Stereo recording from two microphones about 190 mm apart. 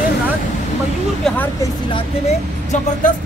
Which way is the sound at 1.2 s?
5° left (ahead or behind).